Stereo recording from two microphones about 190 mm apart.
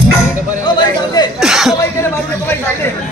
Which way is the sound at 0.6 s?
20° left (ahead or behind).